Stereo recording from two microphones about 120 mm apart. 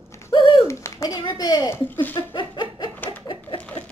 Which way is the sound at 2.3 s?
40° left (ahead or behind).